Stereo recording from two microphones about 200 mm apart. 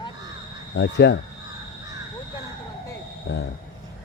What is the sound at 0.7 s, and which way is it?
Speech, 60° left (ahead or behind).